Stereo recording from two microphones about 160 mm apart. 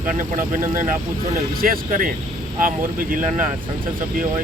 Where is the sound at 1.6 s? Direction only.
60° right (ahead or behind).